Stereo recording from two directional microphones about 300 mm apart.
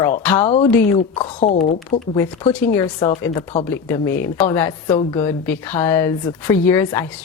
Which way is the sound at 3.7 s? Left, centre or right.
Centre.